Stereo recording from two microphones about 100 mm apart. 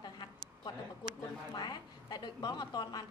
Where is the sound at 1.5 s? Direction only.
45° left (ahead or behind).